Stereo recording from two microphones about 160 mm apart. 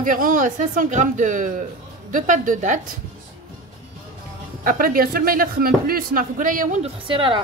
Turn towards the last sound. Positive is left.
turn(degrees=-35)  # may be behind; listen again after turning